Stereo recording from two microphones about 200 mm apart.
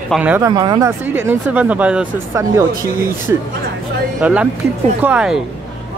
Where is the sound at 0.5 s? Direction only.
20° right (ahead or behind).